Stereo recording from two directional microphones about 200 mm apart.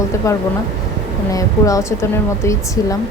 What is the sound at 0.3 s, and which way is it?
A woman's voice, 15° left (ahead or behind).